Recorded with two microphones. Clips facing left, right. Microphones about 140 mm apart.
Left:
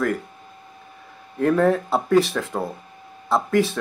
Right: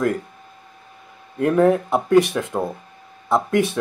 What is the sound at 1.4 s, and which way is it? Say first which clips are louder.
Speech: right 2 dB; 15° right (ahead or behind).